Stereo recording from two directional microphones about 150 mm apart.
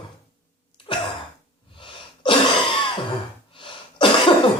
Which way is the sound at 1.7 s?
35° left (ahead or behind).